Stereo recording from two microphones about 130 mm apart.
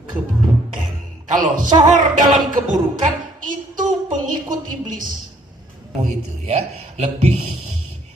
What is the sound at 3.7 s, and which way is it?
A woman's voice, 90° right.